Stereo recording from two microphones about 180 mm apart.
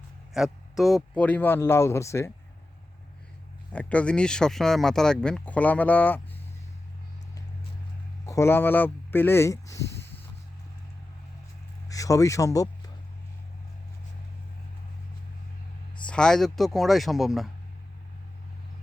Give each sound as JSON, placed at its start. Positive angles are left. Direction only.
{"t": 0.3, "sound": "speech", "side_deg": 0}
{"t": 3.7, "sound": "speech", "side_deg": 5}
{"t": 8.3, "sound": "speech", "side_deg": 15}
{"t": 11.9, "sound": "speech", "side_deg": 20}
{"t": 16.0, "sound": "speech", "side_deg": 5}